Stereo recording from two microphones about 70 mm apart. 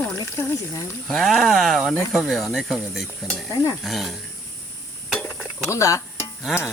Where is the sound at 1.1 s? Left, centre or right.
Centre.